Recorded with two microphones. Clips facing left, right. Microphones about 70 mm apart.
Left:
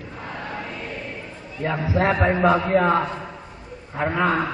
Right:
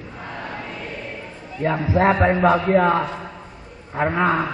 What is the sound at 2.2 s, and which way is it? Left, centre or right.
Speech, centre.